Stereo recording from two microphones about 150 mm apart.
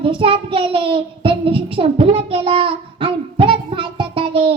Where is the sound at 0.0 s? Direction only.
35° right (ahead or behind).